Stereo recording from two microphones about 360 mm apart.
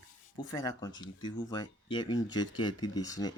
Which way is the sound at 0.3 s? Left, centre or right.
Centre.